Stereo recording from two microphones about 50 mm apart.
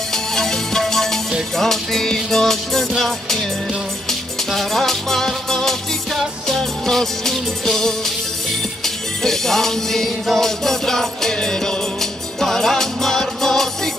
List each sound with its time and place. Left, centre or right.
0.1 s music: centre